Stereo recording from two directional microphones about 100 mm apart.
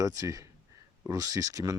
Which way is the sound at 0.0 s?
35° right (ahead or behind).